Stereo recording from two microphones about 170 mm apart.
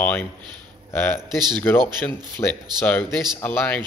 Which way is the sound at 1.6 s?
10° left (ahead or behind).